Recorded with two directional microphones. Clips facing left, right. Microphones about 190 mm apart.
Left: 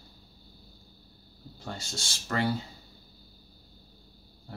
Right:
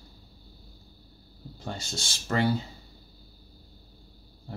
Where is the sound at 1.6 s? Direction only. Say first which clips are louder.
Right 3 dB; 20° right (ahead or behind).